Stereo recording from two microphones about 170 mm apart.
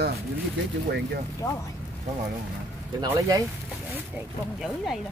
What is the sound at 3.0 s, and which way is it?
Speech, 20° right (ahead or behind).